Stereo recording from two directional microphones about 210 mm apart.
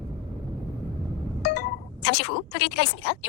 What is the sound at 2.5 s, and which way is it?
Speech, 50° left (ahead or behind).